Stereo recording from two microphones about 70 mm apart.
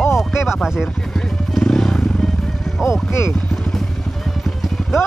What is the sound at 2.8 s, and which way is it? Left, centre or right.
Music, left.